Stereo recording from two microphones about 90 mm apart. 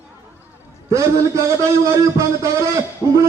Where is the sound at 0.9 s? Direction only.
35° right (ahead or behind).